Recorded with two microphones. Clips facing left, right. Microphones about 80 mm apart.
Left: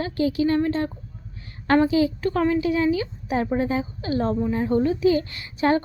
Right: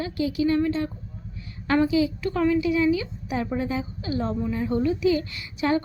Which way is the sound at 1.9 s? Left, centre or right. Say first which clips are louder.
Left 2 dB; left.